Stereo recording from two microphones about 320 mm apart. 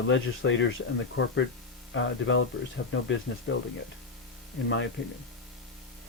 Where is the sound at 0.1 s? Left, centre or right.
Left.